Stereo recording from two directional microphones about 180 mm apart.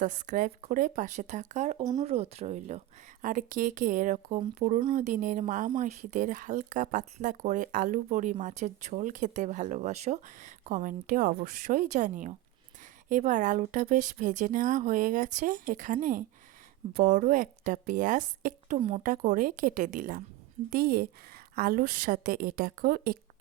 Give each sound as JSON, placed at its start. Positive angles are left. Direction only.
{"t": 0.0, "sound": "speech", "side_deg": -45}
{"t": 1.8, "sound": "speech", "side_deg": -25}
{"t": 2.0, "sound": "speech", "side_deg": -35}
{"t": 19.1, "sound": "a woman's voice", "side_deg": -45}